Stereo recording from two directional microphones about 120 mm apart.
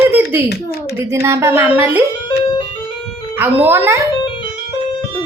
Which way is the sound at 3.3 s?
15° right (ahead or behind).